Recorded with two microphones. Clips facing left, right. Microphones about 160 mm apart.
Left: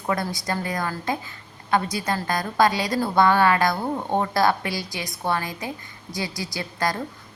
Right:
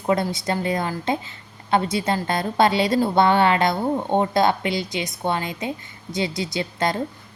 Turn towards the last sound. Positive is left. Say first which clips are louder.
# right 3 dB
turn(degrees=-25)  # may be behind; listen again after turning